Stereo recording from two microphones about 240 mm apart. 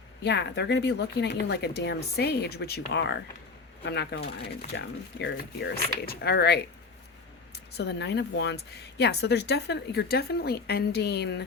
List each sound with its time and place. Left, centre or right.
0.2 s speech: left